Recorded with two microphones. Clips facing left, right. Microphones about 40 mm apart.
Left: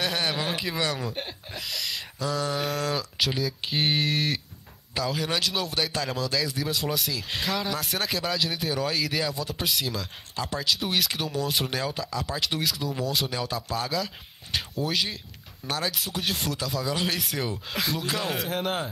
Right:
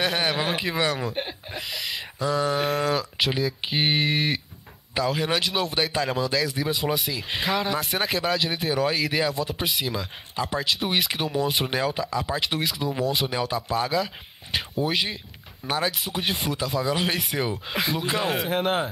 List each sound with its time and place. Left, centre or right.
0.0 s speech: centre